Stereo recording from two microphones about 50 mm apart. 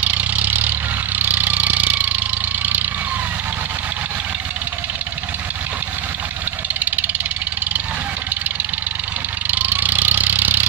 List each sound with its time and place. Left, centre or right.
0.0 s vehicle: right
6.8 s vehicle: right
9.5 s vehicle: right